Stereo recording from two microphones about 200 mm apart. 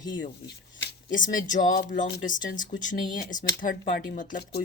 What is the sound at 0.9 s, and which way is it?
Speech, 40° left (ahead or behind).